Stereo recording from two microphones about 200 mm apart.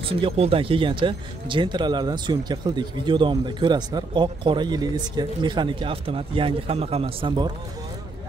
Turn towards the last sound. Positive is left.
turn(degrees=-25)  # may be behind; listen again after turning